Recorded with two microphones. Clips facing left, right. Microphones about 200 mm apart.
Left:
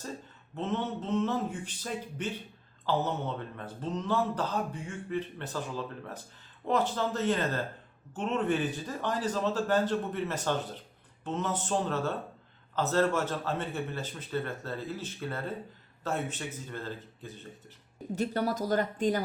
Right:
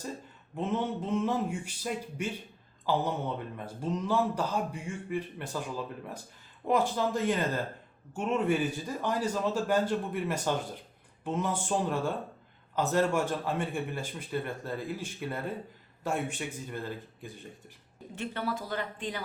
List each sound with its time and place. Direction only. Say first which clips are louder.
0.5 s speech: right 1 dB; 10° right (ahead or behind)
18.1 s speech: left 4 dB; 40° left (ahead or behind)